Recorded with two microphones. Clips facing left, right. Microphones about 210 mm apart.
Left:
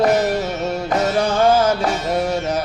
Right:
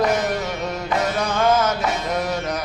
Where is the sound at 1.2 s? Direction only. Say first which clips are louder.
Left 4 dB; 30° left (ahead or behind).